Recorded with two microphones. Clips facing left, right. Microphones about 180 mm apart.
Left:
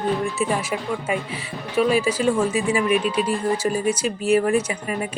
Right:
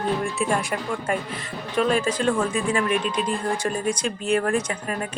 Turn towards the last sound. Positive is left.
turn(degrees=10)  # may be behind; listen again after turning